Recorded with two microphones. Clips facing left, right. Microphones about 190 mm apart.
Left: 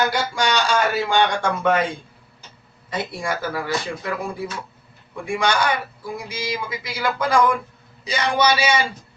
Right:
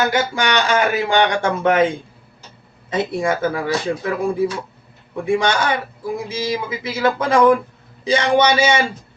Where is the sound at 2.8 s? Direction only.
20° right (ahead or behind).